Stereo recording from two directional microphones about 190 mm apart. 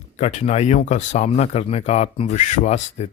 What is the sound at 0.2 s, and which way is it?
Speech, 35° left (ahead or behind).